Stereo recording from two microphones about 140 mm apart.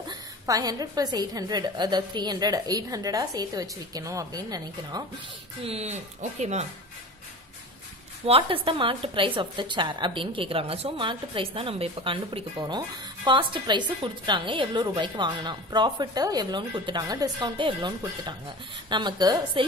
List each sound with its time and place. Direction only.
0.1 s a woman's voice: 25° right (ahead or behind)
5.6 s speech: 45° right (ahead or behind)
8.3 s a woman's voice: 40° right (ahead or behind)